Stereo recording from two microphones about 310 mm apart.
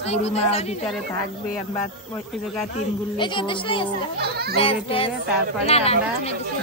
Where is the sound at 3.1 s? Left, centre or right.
Centre.